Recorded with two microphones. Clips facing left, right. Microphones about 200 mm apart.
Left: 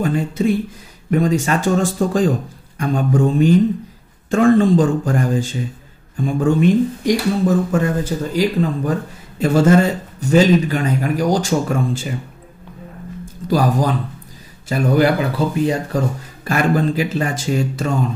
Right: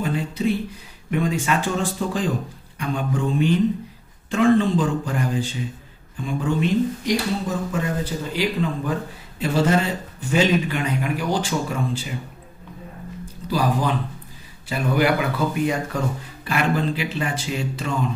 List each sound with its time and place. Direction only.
0.0 s a man's voice: 50° left (ahead or behind)
13.2 s music: 45° left (ahead or behind)
14.7 s speech: 40° left (ahead or behind)
16.4 s a man's voice: 45° left (ahead or behind)